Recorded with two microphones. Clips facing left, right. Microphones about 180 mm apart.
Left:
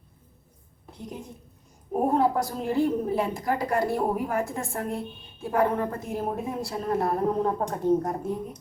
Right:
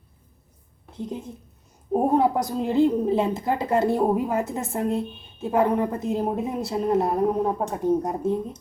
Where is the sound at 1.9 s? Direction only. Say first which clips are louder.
Right 3 dB; 20° right (ahead or behind).